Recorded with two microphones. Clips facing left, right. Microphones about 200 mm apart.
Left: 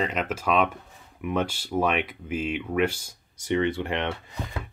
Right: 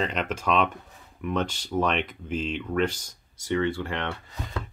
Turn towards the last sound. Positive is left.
turn(degrees=20)  # may be behind; listen again after turning